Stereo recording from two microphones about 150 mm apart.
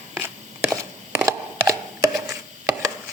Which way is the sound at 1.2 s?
20° right (ahead or behind).